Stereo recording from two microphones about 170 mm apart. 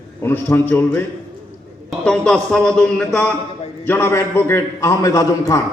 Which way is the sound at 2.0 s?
5° left (ahead or behind).